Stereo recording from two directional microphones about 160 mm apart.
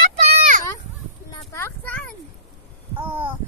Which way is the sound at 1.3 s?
15° left (ahead or behind).